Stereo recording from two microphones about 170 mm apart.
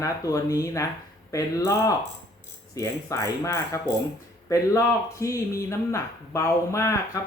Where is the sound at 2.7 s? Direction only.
20° left (ahead or behind).